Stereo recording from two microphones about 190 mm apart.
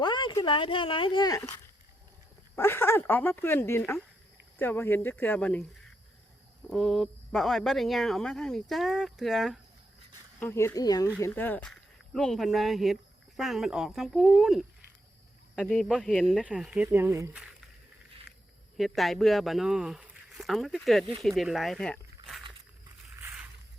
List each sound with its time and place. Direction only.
0.0 s speech: 25° left (ahead or behind)
2.6 s speech: 15° left (ahead or behind)
6.7 s speech: centre (ahead or behind)
10.4 s speech: 10° left (ahead or behind); by 17.3 s 15° right (ahead or behind)
18.8 s speech: centre (ahead or behind)
23.2 s a sound: 5° right (ahead or behind)